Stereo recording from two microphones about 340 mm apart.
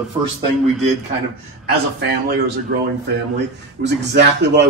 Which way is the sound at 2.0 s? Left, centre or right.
Right.